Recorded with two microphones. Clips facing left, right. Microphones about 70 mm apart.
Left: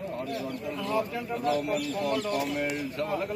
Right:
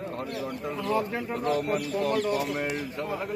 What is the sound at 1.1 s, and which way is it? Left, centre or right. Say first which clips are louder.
Speech: right 1 dB; right.